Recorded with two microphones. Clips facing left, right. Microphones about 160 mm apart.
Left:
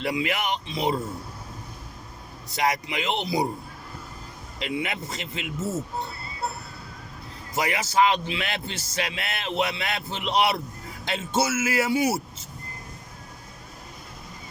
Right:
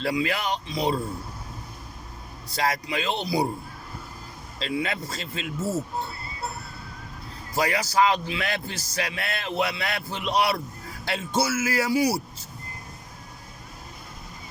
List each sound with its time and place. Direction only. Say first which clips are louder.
0.0 s a man's voice: right 1 dB; 20° left (ahead or behind)
2.5 s a man's voice: left 1 dB; 20° left (ahead or behind)
4.6 s a man's voice: right 1 dB; 20° left (ahead or behind)
7.5 s a man's voice: right 1 dB; 25° left (ahead or behind)